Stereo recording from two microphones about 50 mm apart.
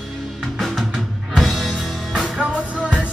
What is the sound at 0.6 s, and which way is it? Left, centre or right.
Music, centre.